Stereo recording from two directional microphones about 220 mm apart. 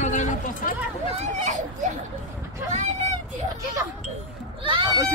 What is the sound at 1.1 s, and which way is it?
Speech, 35° right (ahead or behind).